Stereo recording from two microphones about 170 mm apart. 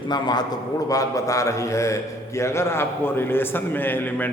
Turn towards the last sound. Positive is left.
turn(degrees=10)  # may be behind; listen again after turning